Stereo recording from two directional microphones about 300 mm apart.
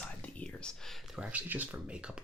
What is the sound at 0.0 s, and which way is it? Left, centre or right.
Speech, centre.